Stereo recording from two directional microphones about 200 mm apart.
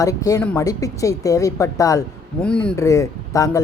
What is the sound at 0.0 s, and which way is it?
Speech, 15° left (ahead or behind).